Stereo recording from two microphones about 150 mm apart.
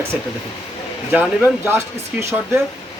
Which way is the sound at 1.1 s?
10° right (ahead or behind).